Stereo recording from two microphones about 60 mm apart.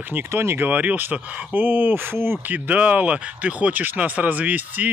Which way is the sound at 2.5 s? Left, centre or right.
Right.